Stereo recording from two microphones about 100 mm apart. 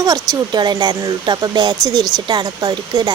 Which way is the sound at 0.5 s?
45° right (ahead or behind).